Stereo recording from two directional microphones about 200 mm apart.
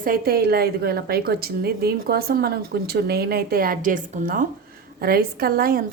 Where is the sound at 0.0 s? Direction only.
45° right (ahead or behind).